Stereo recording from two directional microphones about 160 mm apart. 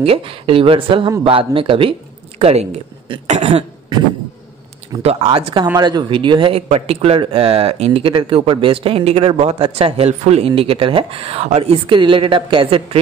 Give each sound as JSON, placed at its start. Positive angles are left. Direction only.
{"t": 0.0, "sound": "speech", "side_deg": -35}
{"t": 5.0, "sound": "speech", "side_deg": -40}